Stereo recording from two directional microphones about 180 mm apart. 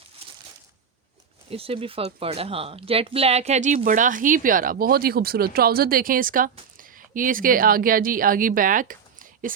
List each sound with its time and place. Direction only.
1.5 s speech: 30° right (ahead or behind); by 9.5 s 50° right (ahead or behind)